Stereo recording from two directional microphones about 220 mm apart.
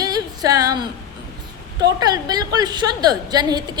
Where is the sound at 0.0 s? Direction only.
15° right (ahead or behind).